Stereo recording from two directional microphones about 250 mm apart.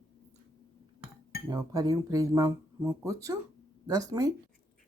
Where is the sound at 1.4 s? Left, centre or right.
Centre.